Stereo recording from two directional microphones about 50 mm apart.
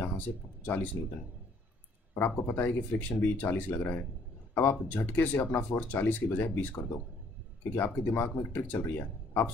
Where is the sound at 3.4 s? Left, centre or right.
Left.